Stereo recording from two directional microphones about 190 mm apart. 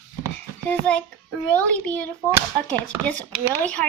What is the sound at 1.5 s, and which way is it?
Speech, 5° left (ahead or behind).